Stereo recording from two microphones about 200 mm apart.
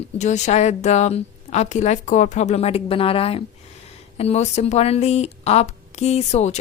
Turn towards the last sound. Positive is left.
turn(degrees=35)  # may be behind; listen again after turning